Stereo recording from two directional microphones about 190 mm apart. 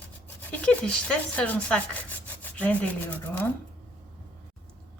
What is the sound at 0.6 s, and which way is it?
Rub, 5° left (ahead or behind).